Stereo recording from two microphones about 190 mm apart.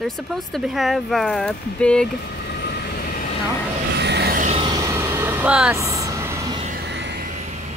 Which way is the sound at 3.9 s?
60° right (ahead or behind).